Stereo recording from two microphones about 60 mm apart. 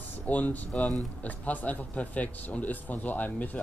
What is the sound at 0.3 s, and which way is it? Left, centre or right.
Speech, left.